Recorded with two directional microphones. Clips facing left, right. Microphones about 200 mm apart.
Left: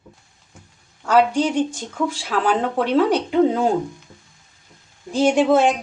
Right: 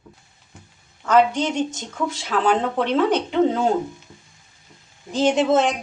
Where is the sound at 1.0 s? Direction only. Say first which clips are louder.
Left 1 dB; 10° left (ahead or behind).